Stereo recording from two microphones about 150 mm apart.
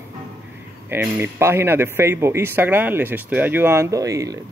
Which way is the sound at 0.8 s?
10° right (ahead or behind).